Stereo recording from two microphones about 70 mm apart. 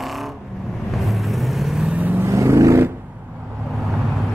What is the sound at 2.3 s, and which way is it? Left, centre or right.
Vehicle, right.